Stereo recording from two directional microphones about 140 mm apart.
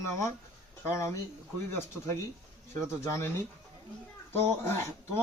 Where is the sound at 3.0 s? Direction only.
20° left (ahead or behind).